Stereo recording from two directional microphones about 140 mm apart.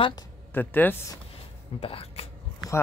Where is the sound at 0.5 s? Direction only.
15° left (ahead or behind).